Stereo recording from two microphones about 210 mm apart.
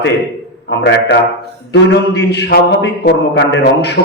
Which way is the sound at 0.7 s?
55° left (ahead or behind).